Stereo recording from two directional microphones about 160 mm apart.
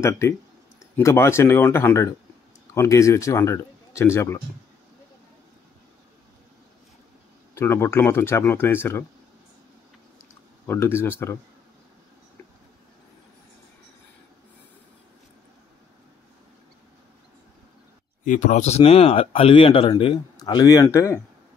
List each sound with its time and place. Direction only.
0.9 s speech: 15° left (ahead or behind)
7.5 s speech: 15° left (ahead or behind)
10.7 s speech: 15° left (ahead or behind)
18.2 s speech: 50° left (ahead or behind); by 21.2 s 20° left (ahead or behind)